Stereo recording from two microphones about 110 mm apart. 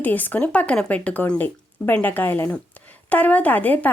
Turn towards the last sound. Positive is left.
turn(degrees=15)  # may be behind; listen again after turning